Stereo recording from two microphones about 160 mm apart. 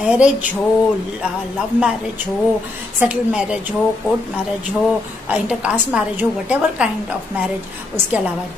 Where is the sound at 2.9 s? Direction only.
5° right (ahead or behind).